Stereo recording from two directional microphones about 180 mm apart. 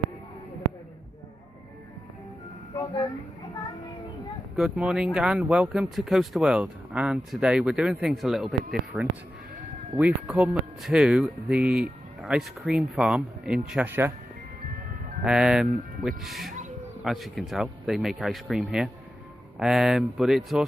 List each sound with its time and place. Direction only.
2.7 s speech: 25° left (ahead or behind)
4.5 s speech: 5° right (ahead or behind)
10.0 s speech: 5° right (ahead or behind)
15.2 s speech: 5° right (ahead or behind)